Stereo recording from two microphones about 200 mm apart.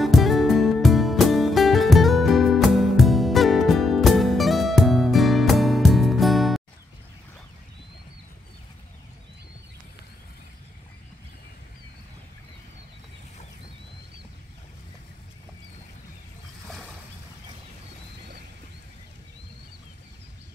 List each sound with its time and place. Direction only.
0.0 s music: centre (ahead or behind)